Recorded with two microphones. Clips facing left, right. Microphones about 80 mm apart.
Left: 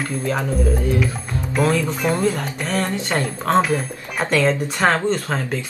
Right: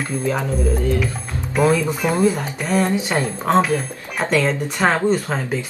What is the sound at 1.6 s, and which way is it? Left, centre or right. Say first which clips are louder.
Speech: right 2 dB; centre.